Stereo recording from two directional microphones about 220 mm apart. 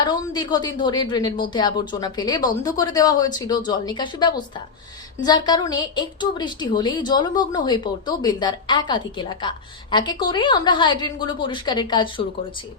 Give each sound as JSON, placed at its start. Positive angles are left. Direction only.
{"t": 0.0, "sound": "a woman's voice", "side_deg": 20}